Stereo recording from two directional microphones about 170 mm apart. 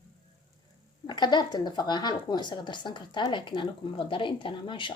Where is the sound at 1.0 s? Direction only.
25° left (ahead or behind).